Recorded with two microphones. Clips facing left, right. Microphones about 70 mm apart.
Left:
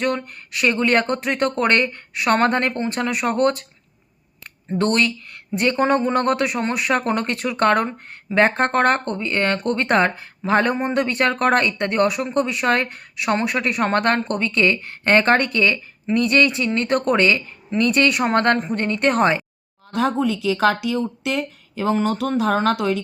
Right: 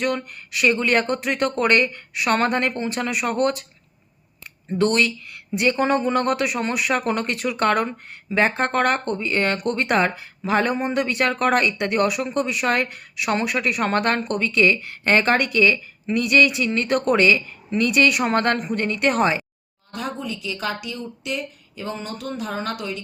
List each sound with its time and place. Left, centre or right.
0.3 s speech: left
4.8 s speech: left
19.9 s speech: left